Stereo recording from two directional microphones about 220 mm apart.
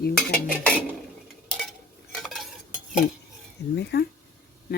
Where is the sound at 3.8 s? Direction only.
50° left (ahead or behind).